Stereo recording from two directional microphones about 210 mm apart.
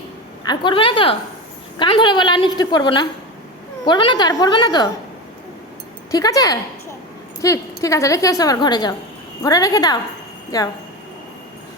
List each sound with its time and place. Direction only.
0.4 s a woman's voice: 25° left (ahead or behind)
6.1 s a woman's voice: 15° left (ahead or behind)